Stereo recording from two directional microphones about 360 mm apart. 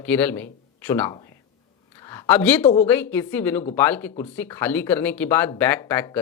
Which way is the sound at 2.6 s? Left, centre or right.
Centre.